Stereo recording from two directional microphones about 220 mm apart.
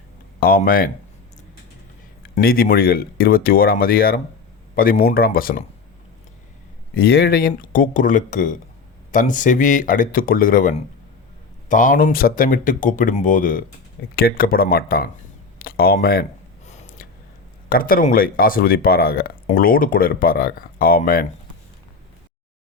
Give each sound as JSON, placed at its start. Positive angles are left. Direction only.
{"t": 0.3, "sound": "speech", "side_deg": 40}
{"t": 2.3, "sound": "speech", "side_deg": 40}
{"t": 6.9, "sound": "speech", "side_deg": 45}
{"t": 16.6, "sound": "a sound", "side_deg": 35}
{"t": 17.7, "sound": "speech", "side_deg": 40}